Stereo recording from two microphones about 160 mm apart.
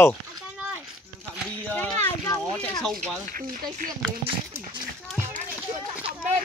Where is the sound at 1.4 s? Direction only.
10° left (ahead or behind).